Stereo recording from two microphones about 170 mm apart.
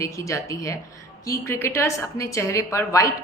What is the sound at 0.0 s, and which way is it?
A woman's voice, 20° left (ahead or behind).